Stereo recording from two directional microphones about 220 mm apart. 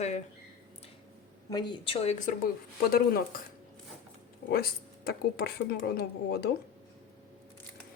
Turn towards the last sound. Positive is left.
turn(degrees=45)  # may be behind; listen again after turning